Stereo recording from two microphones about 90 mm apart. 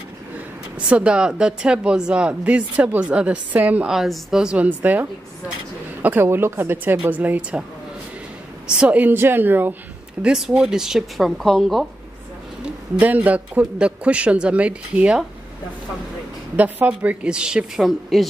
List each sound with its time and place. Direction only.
0.7 s speech: 15° right (ahead or behind)
3.9 s speech: 5° right (ahead or behind)
6.0 s a woman's voice: 25° right (ahead or behind)
8.6 s a woman's voice: 10° right (ahead or behind)
10.2 s speech: 5° right (ahead or behind)
12.6 s speech: 15° right (ahead or behind)
16.5 s speech: 20° right (ahead or behind); by 18.2 s centre (ahead or behind)